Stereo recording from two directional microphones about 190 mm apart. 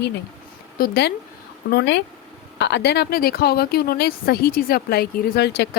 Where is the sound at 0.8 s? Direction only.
60° left (ahead or behind).